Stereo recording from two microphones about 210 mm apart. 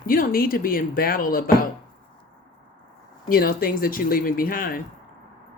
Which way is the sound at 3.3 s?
45° left (ahead or behind).